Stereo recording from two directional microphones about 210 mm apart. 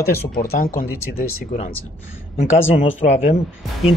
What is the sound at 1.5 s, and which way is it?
Speech, 30° left (ahead or behind).